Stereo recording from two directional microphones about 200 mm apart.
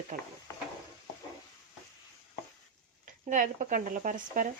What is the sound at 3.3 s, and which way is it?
Speech, 40° right (ahead or behind).